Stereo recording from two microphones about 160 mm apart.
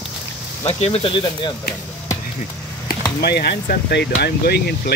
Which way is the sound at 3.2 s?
80° left.